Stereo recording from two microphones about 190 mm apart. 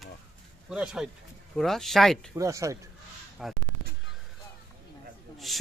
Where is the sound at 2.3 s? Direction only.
15° right (ahead or behind).